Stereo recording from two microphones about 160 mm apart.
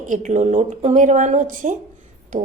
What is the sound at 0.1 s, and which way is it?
A woman's voice, 50° right (ahead or behind).